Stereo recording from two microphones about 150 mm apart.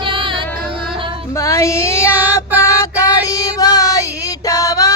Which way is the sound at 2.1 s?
10° right (ahead or behind).